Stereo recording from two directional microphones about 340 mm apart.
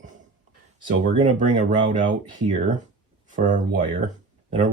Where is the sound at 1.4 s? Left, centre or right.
Right.